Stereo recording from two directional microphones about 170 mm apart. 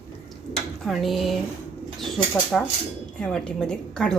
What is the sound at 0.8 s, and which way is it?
Speech, centre (ahead or behind).